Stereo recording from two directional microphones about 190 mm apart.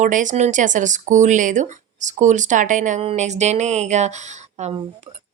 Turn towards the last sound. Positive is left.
turn(degrees=-40)  # may be behind; listen again after turning